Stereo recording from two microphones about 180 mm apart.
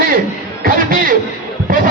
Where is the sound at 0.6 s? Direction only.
50° right (ahead or behind).